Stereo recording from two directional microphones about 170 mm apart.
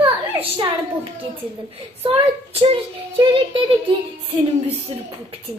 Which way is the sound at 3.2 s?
30° right (ahead or behind).